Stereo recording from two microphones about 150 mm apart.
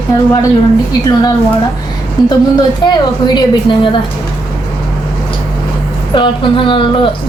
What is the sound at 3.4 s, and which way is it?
Speech, 35° left (ahead or behind).